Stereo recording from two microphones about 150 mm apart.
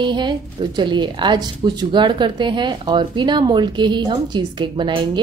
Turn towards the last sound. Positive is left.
turn(degrees=-30)  # may be behind; listen again after turning